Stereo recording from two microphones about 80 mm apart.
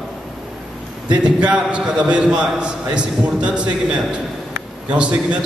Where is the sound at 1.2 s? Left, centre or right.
Centre.